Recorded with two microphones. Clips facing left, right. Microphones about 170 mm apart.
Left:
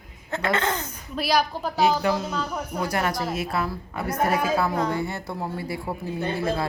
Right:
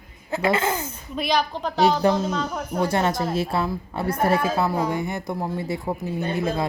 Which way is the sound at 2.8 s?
25° right (ahead or behind).